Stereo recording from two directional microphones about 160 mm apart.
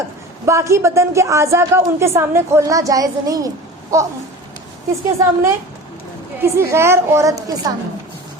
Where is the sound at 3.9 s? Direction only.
20° right (ahead or behind).